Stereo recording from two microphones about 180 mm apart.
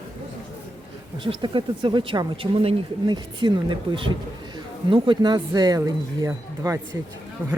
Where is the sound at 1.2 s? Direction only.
30° right (ahead or behind).